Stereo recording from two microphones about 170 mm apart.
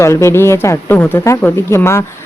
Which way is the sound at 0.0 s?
15° left (ahead or behind).